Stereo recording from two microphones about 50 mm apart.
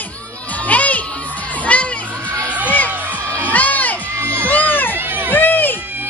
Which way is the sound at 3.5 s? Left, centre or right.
Left.